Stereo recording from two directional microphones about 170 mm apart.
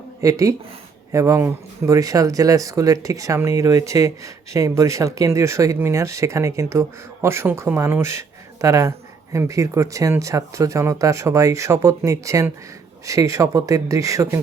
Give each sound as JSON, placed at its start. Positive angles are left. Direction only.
{"t": 0.2, "sound": "speech", "side_deg": -20}